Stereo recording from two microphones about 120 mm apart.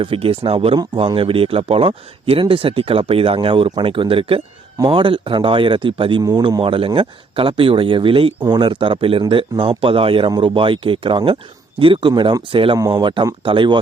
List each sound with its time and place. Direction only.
0.0 s speech: 50° right (ahead or behind)